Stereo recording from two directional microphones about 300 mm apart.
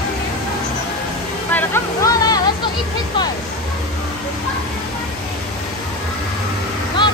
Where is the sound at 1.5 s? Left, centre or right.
Centre.